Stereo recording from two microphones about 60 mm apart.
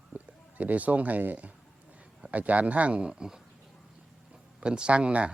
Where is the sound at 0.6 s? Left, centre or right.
Right; by 3.4 s centre.